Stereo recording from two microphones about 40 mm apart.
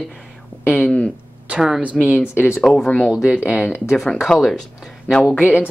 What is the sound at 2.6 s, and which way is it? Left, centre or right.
Speech, centre.